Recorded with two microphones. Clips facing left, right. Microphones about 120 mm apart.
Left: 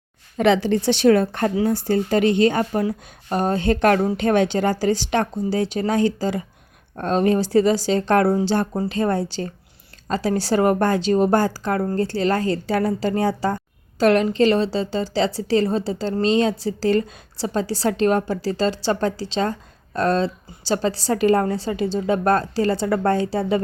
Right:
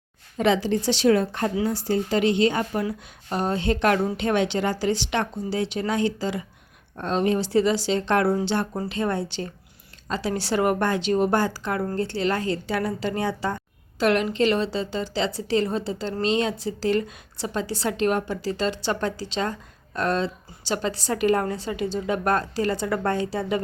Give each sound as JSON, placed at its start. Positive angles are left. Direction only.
{"t": 0.3, "sound": "a woman's voice", "side_deg": 65}